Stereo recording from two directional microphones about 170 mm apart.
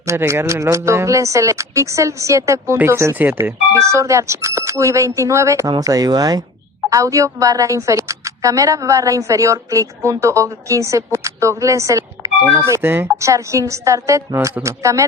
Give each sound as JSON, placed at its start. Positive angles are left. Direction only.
{"t": 0.0, "sound": "a woman's voice", "side_deg": -15}